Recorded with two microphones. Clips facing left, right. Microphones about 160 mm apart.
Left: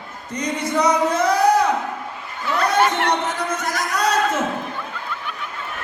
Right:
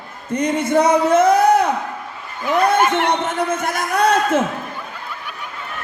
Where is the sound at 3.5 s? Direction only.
55° right (ahead or behind).